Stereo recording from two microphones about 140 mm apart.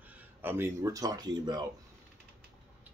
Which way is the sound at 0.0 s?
10° right (ahead or behind).